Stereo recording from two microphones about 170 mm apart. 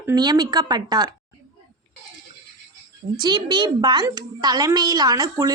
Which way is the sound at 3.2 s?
25° right (ahead or behind).